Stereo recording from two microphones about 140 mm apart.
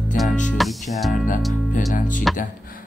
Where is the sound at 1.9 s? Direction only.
70° left (ahead or behind).